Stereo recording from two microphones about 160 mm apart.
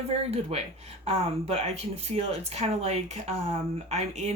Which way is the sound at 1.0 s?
40° right (ahead or behind).